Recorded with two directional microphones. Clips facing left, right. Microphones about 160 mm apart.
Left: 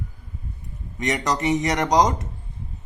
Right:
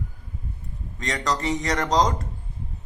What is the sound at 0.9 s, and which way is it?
A man's voice, 20° left (ahead or behind).